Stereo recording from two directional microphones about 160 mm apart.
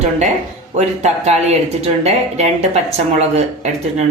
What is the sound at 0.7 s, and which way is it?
Speech, 45° right (ahead or behind).